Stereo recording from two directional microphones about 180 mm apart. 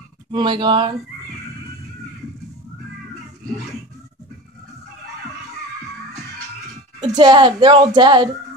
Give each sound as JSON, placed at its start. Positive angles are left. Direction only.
{"t": 0.3, "sound": "a woman's voice", "side_deg": -25}
{"t": 7.0, "sound": "a woman's voice", "side_deg": -25}